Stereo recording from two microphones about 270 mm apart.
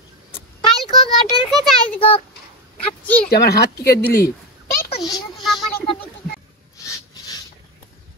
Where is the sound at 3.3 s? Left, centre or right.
Left.